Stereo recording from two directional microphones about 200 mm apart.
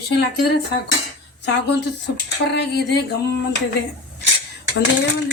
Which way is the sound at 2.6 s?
55° left (ahead or behind).